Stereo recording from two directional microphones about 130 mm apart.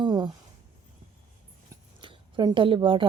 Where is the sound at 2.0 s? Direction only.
40° right (ahead or behind).